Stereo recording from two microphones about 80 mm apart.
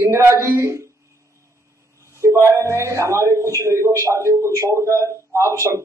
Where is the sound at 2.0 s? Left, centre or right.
Right.